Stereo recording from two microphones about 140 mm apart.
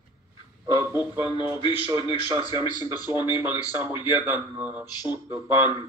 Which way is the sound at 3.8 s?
35° left (ahead or behind).